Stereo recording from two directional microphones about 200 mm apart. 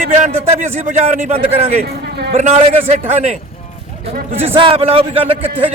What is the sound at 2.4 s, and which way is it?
Speech, 35° right (ahead or behind).